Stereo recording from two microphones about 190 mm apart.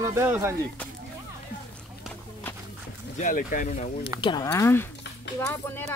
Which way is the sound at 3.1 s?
45° left (ahead or behind).